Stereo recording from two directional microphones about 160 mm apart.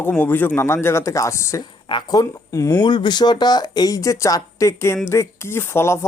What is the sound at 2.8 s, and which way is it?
Speech, 30° left (ahead or behind).